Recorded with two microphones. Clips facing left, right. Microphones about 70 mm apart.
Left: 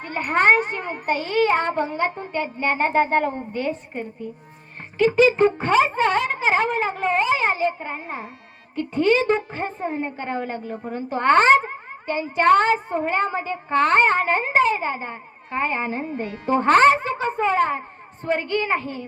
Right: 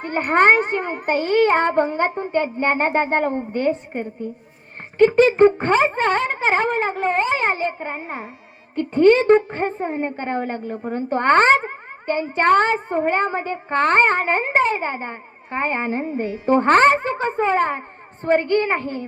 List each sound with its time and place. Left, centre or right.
0.0 s a child's voice: right
2.0 s speech: centre
2.3 s speech: right
2.8 s speech: right
3.5 s speech: right
7.8 s speech: right
8.7 s speech: right